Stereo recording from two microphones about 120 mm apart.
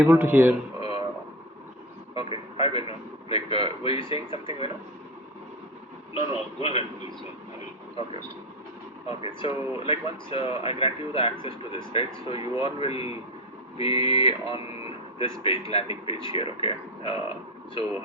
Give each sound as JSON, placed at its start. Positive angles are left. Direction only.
{"t": 0.0, "sound": "speech", "side_deg": -15}
{"t": 2.1, "sound": "vehicle", "side_deg": 50}
{"t": 3.2, "sound": "speech", "side_deg": 55}
{"t": 6.1, "sound": "speech", "side_deg": 50}
{"t": 9.0, "sound": "speech", "side_deg": 50}